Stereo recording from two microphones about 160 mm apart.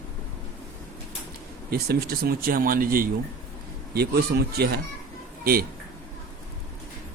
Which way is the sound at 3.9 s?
80° right.